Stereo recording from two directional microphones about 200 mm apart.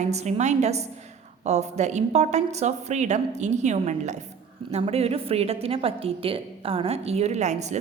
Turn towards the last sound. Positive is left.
turn(degrees=-35)  # may be behind; listen again after turning